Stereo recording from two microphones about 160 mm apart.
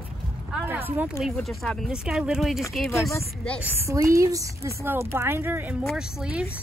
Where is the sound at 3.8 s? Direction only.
20° right (ahead or behind).